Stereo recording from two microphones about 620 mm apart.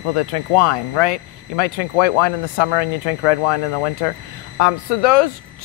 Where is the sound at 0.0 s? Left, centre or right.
Left.